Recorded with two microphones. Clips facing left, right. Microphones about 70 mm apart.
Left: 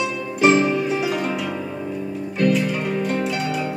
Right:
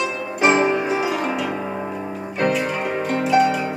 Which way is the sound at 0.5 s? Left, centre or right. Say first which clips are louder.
Even; right.